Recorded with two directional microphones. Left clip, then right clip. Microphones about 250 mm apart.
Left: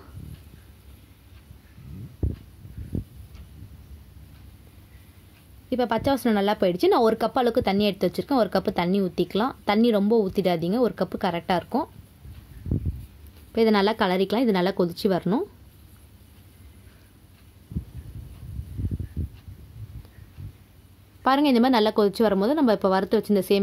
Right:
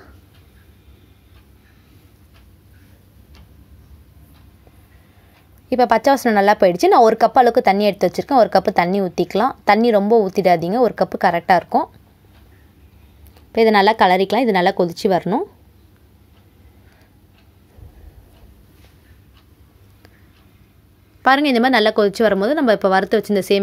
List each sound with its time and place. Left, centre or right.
5.7 s speech: centre
13.5 s speech: centre
21.2 s speech: centre